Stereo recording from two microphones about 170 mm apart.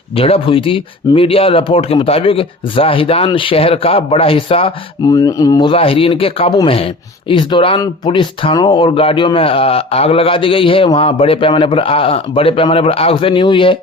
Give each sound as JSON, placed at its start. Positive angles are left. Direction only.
{"t": 0.2, "sound": "speech", "side_deg": 35}
{"t": 5.0, "sound": "speech", "side_deg": 20}